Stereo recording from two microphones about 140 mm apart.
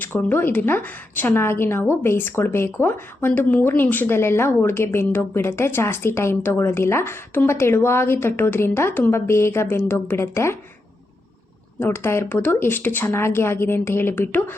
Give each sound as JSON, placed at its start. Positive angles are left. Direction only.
{"t": 0.0, "sound": "a woman's voice", "side_deg": 15}
{"t": 11.8, "sound": "a woman's voice", "side_deg": 15}